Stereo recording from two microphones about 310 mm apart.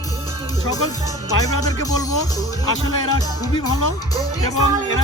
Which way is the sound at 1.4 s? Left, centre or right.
Centre.